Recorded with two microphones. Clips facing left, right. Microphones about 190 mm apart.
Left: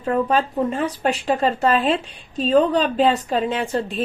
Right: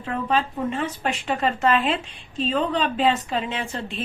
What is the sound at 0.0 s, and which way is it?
A woman's voice, 40° left (ahead or behind).